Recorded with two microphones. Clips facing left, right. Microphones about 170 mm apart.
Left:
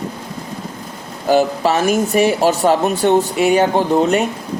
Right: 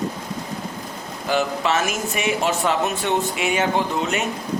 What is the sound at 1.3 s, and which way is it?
Speech, 35° left (ahead or behind).